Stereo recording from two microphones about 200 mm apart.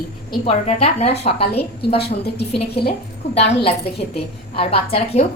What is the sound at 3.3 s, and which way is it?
A woman's voice, 30° left (ahead or behind).